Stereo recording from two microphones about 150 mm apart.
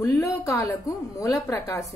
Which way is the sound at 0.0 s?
20° left (ahead or behind).